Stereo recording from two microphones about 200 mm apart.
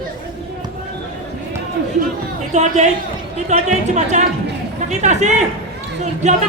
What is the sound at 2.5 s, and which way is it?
Speech, 35° right (ahead or behind).